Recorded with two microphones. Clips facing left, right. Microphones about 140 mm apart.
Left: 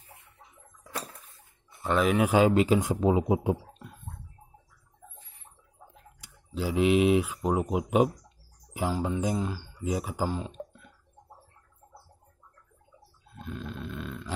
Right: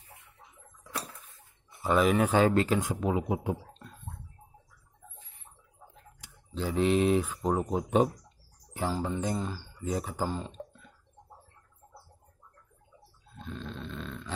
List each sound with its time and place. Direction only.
1.8 s speech: centre (ahead or behind)
2.2 s speech: 15° left (ahead or behind)
6.5 s speech: 5° left (ahead or behind)
13.3 s a sound: 5° left (ahead or behind)